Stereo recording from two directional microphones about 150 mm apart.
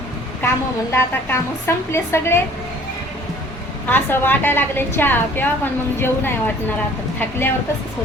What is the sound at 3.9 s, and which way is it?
A woman's voice, 15° left (ahead or behind).